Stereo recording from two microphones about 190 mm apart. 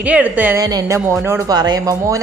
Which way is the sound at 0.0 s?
5° right (ahead or behind).